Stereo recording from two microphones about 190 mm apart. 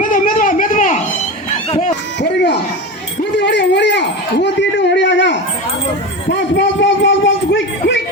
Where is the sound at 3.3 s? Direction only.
65° left (ahead or behind).